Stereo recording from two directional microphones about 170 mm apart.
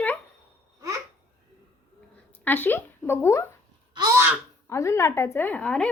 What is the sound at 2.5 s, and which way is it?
Speech, 10° left (ahead or behind).